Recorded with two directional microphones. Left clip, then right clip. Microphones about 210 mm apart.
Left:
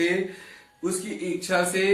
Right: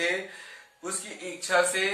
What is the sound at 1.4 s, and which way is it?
Speech, 5° right (ahead or behind).